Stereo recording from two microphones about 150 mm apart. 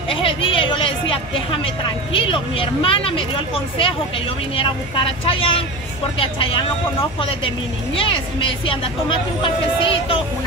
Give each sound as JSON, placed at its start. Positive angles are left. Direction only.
{"t": 0.1, "sound": "a woman's voice", "side_deg": 35}